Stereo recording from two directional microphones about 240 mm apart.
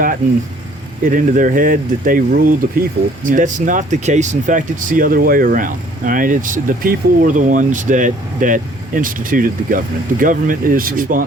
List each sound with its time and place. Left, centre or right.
1.0 s speech: right